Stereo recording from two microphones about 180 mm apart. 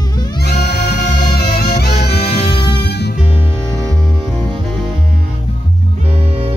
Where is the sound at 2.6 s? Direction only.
65° left (ahead or behind).